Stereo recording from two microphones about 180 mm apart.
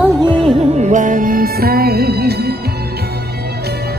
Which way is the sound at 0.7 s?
40° right (ahead or behind).